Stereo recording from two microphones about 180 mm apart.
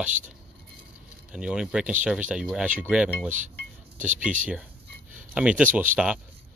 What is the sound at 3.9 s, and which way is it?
Speech, 45° right (ahead or behind).